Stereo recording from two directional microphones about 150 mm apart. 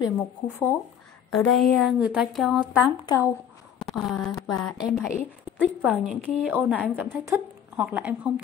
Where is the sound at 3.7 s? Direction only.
Centre (ahead or behind).